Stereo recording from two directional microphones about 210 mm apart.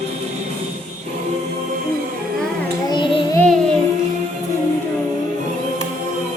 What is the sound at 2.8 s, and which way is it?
Child singing, 20° left (ahead or behind).